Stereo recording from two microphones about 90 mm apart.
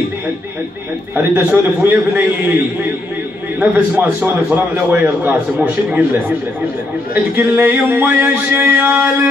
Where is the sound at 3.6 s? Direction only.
15° right (ahead or behind).